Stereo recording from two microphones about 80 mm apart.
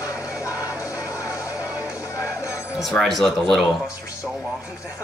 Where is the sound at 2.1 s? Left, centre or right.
Left.